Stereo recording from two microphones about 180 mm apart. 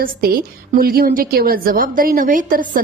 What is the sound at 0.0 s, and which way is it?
A woman's voice, 55° right (ahead or behind).